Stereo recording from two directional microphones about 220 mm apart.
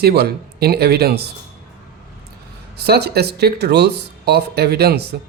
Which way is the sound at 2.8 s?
45° right (ahead or behind).